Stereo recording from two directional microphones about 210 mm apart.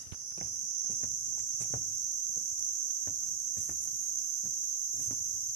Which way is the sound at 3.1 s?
45° right (ahead or behind).